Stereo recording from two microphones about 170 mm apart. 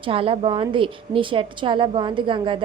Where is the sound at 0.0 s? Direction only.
35° right (ahead or behind).